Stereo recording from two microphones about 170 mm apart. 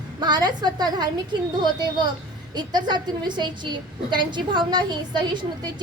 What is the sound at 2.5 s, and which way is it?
A woman's voice, 25° right (ahead or behind).